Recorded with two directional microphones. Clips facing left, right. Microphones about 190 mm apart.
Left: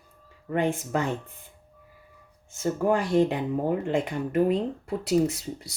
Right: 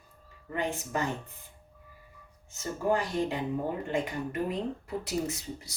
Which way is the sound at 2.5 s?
60° left (ahead or behind).